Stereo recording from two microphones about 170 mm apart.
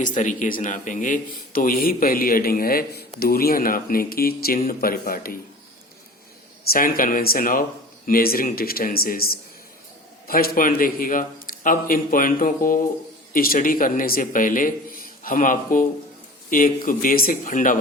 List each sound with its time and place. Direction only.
0.0 s speech: 50° left (ahead or behind)
6.7 s a man's voice: 55° left (ahead or behind)